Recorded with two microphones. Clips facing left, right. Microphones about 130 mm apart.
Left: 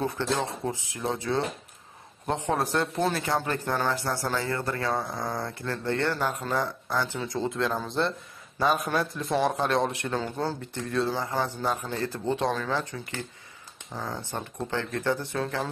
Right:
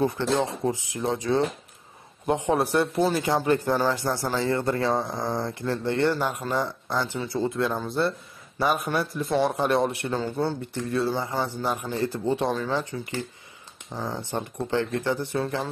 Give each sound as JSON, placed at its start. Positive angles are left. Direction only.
{"t": 0.0, "sound": "a man's voice", "side_deg": -15}
{"t": 7.2, "sound": "a man's voice", "side_deg": 0}
{"t": 13.9, "sound": "a man's voice", "side_deg": -10}